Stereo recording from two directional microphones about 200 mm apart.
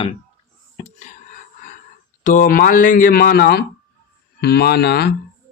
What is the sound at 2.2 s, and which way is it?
Speech, 40° left (ahead or behind).